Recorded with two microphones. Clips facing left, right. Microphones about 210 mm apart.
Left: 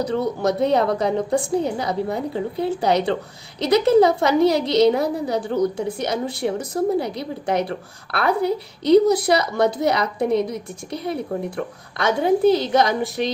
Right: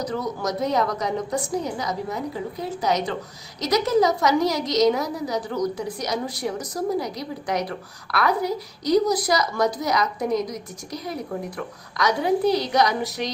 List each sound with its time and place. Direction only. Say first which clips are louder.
0.0 s a woman's voice: left 6 dB; 30° left (ahead or behind)